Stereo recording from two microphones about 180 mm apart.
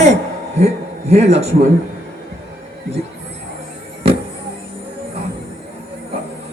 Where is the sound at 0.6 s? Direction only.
35° right (ahead or behind).